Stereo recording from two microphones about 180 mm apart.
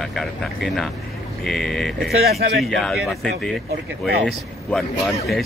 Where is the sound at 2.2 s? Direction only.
60° right (ahead or behind).